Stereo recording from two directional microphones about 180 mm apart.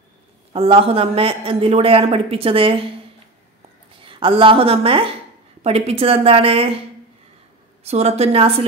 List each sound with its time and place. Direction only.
0.5 s a man's voice: 30° right (ahead or behind)
4.0 s a woman's voice: 30° right (ahead or behind)
7.8 s a man's voice: 35° right (ahead or behind)